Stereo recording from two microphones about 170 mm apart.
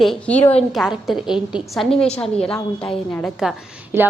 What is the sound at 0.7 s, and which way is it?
A woman's voice, centre (ahead or behind).